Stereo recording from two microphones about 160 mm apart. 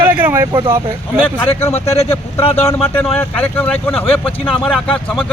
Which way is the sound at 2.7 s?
10° left (ahead or behind).